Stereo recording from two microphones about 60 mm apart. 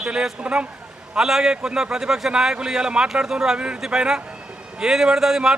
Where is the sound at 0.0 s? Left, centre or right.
Centre.